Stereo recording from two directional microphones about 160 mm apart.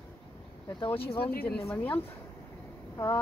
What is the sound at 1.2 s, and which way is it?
Speech, 75° left (ahead or behind).